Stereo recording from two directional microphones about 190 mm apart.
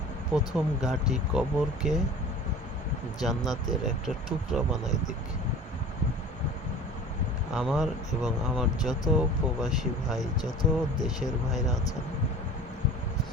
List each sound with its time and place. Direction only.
0.5 s speech: centre (ahead or behind)
3.2 s speech: centre (ahead or behind)
7.5 s speech: 5° right (ahead or behind)
10.2 s speech: 20° left (ahead or behind)
11.2 s speech: centre (ahead or behind)